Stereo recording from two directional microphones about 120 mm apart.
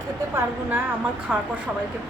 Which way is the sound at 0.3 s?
15° right (ahead or behind).